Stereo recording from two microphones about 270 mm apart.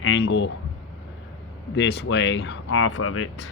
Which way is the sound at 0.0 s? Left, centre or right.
Left.